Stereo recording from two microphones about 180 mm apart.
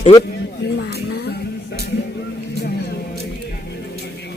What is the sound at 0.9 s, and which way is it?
Music, 65° left (ahead or behind).